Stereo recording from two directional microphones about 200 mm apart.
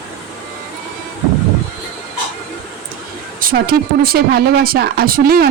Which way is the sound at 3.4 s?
45° right (ahead or behind).